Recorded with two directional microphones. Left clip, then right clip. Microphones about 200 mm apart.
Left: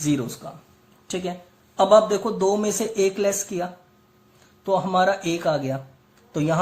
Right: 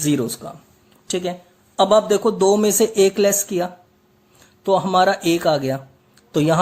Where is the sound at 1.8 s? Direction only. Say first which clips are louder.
Right 1 dB; 45° right (ahead or behind).